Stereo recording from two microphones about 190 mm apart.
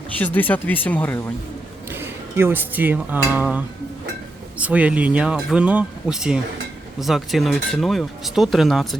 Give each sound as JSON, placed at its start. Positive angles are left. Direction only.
{"t": 0.2, "sound": "speech", "side_deg": 10}
{"t": 2.0, "sound": "dishes", "side_deg": -10}
{"t": 4.5, "sound": "speech", "side_deg": -5}